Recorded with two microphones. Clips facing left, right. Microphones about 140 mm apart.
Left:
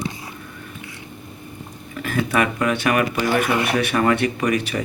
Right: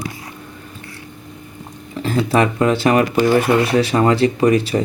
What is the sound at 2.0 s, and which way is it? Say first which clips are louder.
Speech: right 4 dB; 30° right (ahead or behind).